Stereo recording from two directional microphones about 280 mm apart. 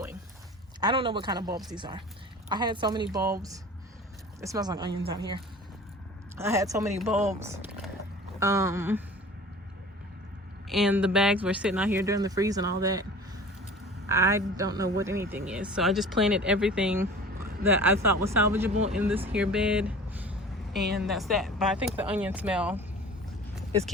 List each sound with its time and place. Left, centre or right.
0.8 s speech: centre
4.4 s speech: centre
10.7 s speech: centre
14.1 s speech: centre